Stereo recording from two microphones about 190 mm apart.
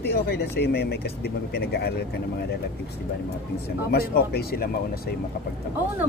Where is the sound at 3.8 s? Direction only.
55° left (ahead or behind).